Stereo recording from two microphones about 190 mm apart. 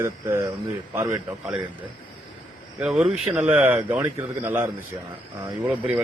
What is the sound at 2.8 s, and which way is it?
Speech, 5° right (ahead or behind).